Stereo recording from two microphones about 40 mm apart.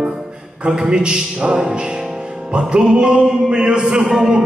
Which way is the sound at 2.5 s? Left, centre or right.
Right.